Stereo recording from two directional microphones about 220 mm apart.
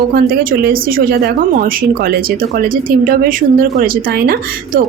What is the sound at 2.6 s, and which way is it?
A woman's voice, 40° right (ahead or behind).